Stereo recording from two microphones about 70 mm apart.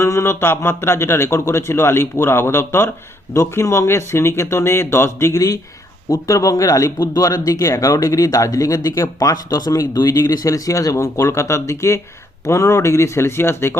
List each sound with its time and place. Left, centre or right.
0.0 s speech: left
6.1 s speech: left